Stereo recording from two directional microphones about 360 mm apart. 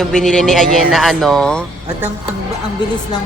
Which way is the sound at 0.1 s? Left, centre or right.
Centre.